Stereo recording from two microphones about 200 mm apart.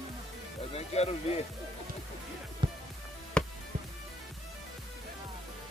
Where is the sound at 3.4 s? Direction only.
5° left (ahead or behind).